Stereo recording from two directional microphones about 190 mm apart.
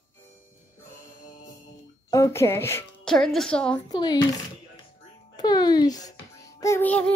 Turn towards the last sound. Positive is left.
turn(degrees=10)  # may be behind; listen again after turning